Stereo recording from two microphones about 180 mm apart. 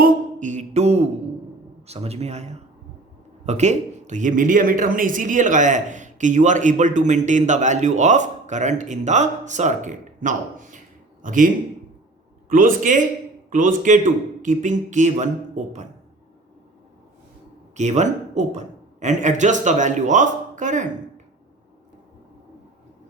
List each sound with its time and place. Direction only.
0.0 s a sound: 45° right (ahead or behind)
1.9 s a man's voice: 35° right (ahead or behind)
17.7 s a man's voice: 40° right (ahead or behind)